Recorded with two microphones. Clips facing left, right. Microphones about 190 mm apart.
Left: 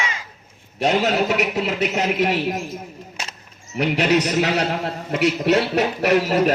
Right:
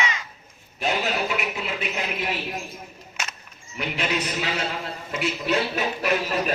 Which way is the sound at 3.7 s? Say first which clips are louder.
Left 9 dB; 70° left (ahead or behind).